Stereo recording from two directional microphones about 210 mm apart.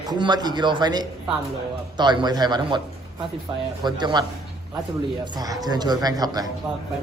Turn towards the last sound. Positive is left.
turn(degrees=-20)  # may be behind; listen again after turning